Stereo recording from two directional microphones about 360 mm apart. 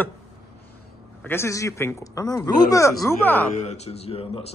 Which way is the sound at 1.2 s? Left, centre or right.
Centre.